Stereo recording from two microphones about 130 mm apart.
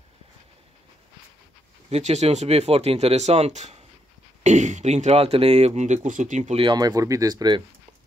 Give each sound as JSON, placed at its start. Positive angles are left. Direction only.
{"t": 1.9, "sound": "speech", "side_deg": -60}
{"t": 6.0, "sound": "speech", "side_deg": -75}
{"t": 6.5, "sound": "speech", "side_deg": -35}